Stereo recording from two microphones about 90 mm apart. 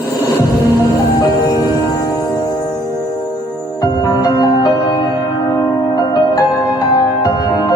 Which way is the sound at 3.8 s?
45° left (ahead or behind).